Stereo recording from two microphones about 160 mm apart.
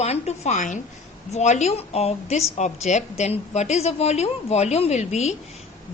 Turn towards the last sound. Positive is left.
turn(degrees=45)  # may be behind; listen again after turning